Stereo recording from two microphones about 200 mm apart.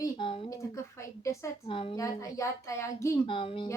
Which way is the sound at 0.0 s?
25° left (ahead or behind).